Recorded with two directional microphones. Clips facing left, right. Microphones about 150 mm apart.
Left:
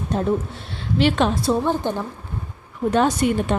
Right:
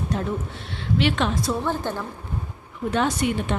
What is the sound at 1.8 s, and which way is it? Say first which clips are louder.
Speech: left 4 dB; 15° left (ahead or behind).